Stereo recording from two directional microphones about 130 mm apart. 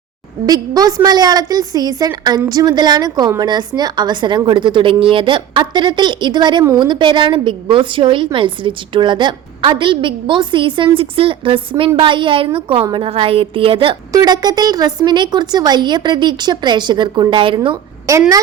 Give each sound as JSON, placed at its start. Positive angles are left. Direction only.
{"t": 0.4, "sound": "a woman's voice", "side_deg": -30}
{"t": 14.1, "sound": "a woman's voice", "side_deg": -30}
{"t": 18.1, "sound": "speech", "side_deg": -25}